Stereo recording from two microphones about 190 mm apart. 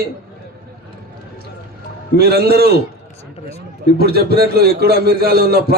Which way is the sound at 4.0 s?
55° right (ahead or behind).